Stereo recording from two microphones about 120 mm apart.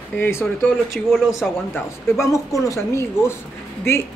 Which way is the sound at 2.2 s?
25° left (ahead or behind).